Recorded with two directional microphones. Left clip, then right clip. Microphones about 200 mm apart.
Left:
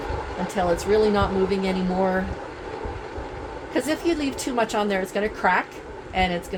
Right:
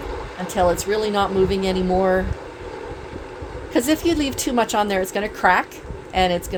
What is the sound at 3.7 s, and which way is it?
A woman's voice, 55° right (ahead or behind).